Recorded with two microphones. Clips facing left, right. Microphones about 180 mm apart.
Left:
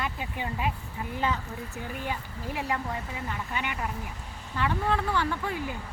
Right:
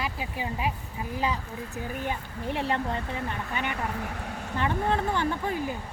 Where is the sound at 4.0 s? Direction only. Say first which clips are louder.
Right 6 dB; 70° right (ahead or behind).